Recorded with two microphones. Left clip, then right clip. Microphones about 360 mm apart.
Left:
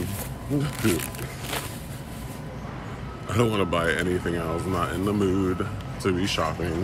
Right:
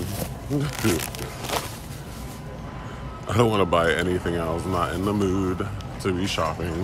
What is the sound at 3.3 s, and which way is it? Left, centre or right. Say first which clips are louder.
Speech: right 4 dB; centre.